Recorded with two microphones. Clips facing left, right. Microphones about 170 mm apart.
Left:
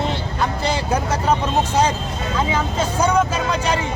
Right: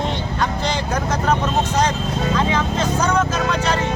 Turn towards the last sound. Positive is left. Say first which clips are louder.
# right 1 dB
turn(degrees=10)  # may be behind; listen again after turning